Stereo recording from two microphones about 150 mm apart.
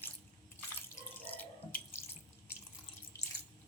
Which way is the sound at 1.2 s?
10° left (ahead or behind).